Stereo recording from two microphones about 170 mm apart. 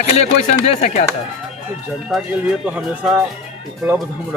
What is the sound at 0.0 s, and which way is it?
Speech, 40° left (ahead or behind).